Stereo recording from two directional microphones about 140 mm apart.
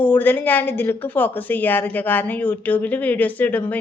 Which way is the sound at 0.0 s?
15° left (ahead or behind).